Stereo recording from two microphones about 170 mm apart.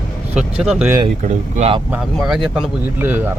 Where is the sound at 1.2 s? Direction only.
40° right (ahead or behind).